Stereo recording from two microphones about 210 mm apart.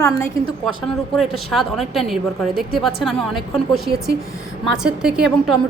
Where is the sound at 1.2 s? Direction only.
Centre (ahead or behind).